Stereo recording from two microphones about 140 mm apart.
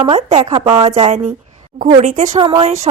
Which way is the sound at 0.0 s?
45° right (ahead or behind).